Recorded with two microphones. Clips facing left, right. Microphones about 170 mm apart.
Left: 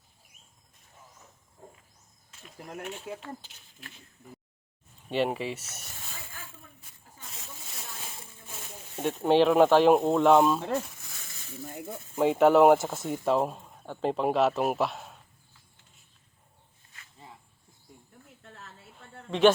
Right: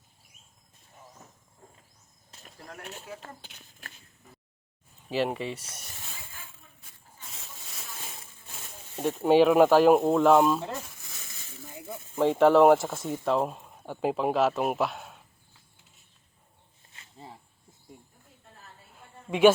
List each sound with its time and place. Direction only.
2.3 s cricket: 35° right (ahead or behind)
3.4 s speech: 45° right (ahead or behind)
5.0 s speech: centre (ahead or behind)
9.0 s speech: 5° right (ahead or behind)
10.8 s a sound: centre (ahead or behind)
12.1 s speech: 5° left (ahead or behind)
16.9 s snake: 30° right (ahead or behind)
18.4 s a sound: 85° left
19.3 s a man's voice: 10° right (ahead or behind)